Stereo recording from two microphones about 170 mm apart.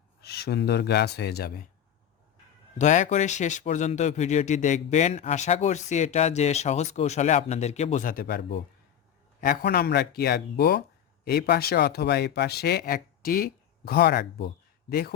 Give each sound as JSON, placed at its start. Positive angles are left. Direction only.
{"t": 0.2, "sound": "speech", "side_deg": 70}
{"t": 2.7, "sound": "speech", "side_deg": 45}
{"t": 8.0, "sound": "speech", "side_deg": 60}
{"t": 9.4, "sound": "speech", "side_deg": 55}